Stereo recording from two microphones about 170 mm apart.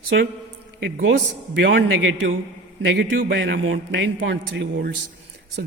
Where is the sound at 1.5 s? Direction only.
90° right.